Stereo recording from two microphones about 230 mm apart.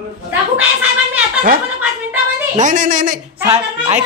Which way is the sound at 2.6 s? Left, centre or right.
Right.